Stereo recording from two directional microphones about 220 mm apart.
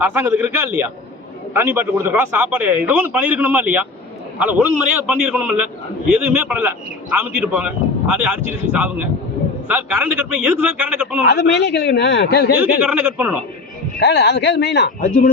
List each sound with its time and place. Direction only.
0.0 s a man's voice: 10° right (ahead or behind)
11.3 s speech: 50° left (ahead or behind)
12.8 s a man's voice: 5° right (ahead or behind)
14.0 s speech: 50° left (ahead or behind)